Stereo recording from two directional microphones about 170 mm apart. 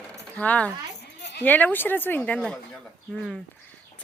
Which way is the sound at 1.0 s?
85° left.